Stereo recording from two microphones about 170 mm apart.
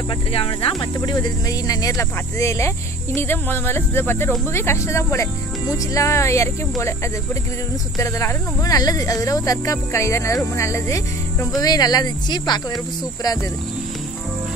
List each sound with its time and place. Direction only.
0.3 s speech: 35° left (ahead or behind); by 6.5 s 15° left (ahead or behind)
8.0 s speech: 15° left (ahead or behind)